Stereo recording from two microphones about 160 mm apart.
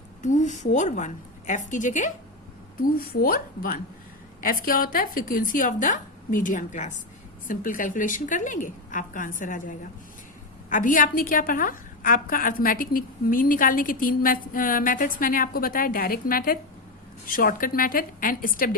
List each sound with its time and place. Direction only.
0.2 s a woman's voice: 50° left (ahead or behind)
3.1 s a woman's voice: 70° left (ahead or behind)